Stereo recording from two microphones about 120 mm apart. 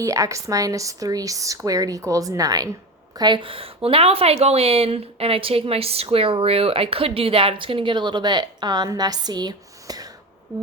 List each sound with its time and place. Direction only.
0.0 s a woman's voice: 25° right (ahead or behind)